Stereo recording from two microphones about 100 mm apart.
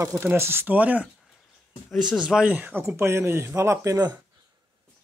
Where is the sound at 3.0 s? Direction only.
25° right (ahead or behind).